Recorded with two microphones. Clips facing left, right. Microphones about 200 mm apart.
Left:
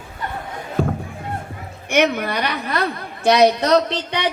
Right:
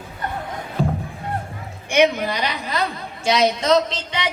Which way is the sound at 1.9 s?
55° left (ahead or behind).